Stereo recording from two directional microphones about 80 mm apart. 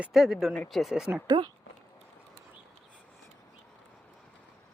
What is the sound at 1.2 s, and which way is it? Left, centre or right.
Speech, right.